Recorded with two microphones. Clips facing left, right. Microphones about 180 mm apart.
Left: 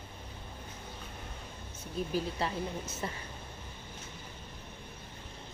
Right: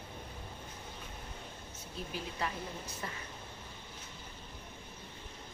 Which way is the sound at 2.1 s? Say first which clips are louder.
Left 4 dB; 30° left (ahead or behind).